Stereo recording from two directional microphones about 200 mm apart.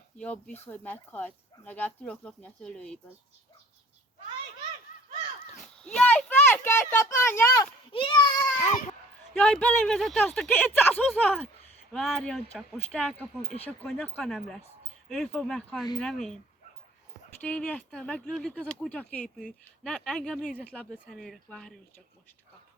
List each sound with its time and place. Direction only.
0.2 s speech: 5° left (ahead or behind)
5.5 s a sound: 5° left (ahead or behind)
7.9 s children playing: 25° left (ahead or behind)
8.5 s baby cry: 35° left (ahead or behind)
9.4 s speech: 5° left (ahead or behind)
17.4 s speech: 5° left (ahead or behind)